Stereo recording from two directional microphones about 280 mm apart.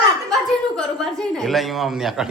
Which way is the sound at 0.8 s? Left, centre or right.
Centre.